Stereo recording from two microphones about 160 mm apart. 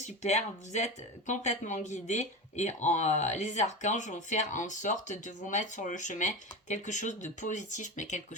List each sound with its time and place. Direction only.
0.0 s speech: 45° left (ahead or behind)